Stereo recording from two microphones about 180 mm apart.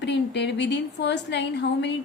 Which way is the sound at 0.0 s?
75° left (ahead or behind).